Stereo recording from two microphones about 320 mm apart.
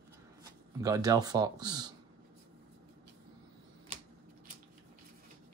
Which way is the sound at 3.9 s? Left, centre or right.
Centre.